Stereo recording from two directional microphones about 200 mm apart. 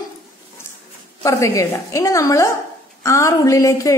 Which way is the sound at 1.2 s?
15° left (ahead or behind).